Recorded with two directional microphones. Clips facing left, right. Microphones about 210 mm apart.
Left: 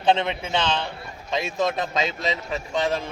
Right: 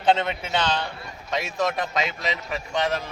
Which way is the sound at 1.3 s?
20° left (ahead or behind).